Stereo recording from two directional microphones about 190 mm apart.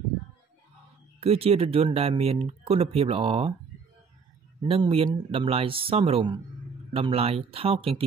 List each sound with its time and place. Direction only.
1.2 s speech: 30° right (ahead or behind)
4.6 s speech: 30° right (ahead or behind)